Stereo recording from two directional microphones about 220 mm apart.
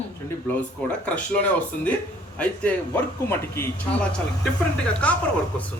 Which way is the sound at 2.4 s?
5° left (ahead or behind).